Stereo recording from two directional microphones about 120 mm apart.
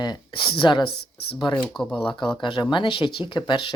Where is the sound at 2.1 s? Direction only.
40° left (ahead or behind).